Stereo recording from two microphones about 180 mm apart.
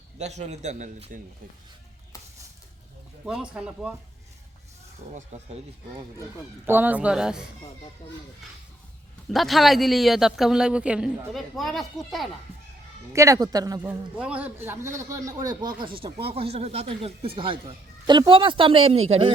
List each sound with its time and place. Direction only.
0.2 s a man's voice: 40° right (ahead or behind)
3.2 s a man's voice: 5° right (ahead or behind)
5.3 s a man's voice: 40° right (ahead or behind)
6.7 s a man's voice: 10° right (ahead or behind)
9.3 s a man's voice: centre (ahead or behind)
13.1 s speech: 20° right (ahead or behind)
14.2 s a man's voice: 5° right (ahead or behind); by 19.3 s 35° right (ahead or behind)